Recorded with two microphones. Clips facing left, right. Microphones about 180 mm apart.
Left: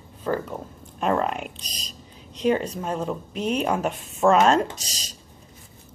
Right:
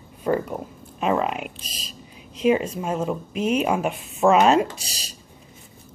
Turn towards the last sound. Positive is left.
turn(degrees=-10)  # may be behind; listen again after turning